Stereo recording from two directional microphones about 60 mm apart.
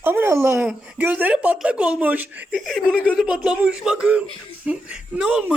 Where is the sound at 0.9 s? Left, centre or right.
Right.